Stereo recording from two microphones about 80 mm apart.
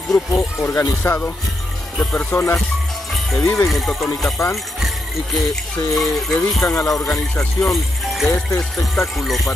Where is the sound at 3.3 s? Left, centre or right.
Left.